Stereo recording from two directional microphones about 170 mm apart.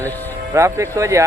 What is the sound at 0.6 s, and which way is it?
Speech, 15° right (ahead or behind).